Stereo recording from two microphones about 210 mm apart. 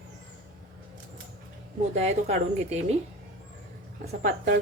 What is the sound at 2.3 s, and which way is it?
Speech, 30° right (ahead or behind).